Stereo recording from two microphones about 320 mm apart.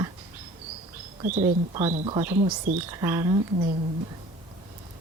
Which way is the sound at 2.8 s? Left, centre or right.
Centre.